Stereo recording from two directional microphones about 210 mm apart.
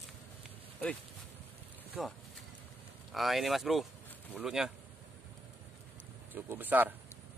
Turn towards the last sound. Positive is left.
turn(degrees=-10)  # may be behind; listen again after turning